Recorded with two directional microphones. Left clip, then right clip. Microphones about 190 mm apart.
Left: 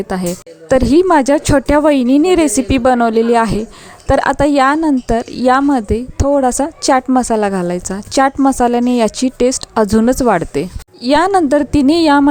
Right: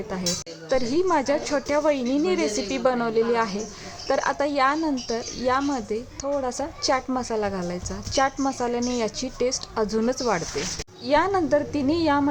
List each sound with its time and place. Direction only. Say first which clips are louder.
0.1 s speech: left 8 dB; 50° left (ahead or behind)